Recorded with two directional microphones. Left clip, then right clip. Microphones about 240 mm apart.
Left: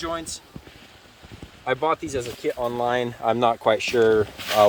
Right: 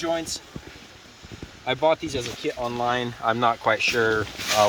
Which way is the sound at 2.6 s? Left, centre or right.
Left.